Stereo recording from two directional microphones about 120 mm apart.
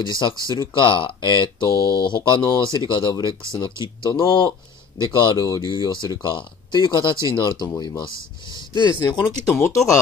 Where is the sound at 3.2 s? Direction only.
25° right (ahead or behind).